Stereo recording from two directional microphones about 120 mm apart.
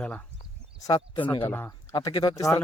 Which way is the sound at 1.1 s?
45° left (ahead or behind).